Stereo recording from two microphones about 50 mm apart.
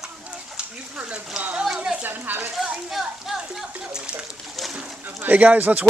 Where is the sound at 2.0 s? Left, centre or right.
Right.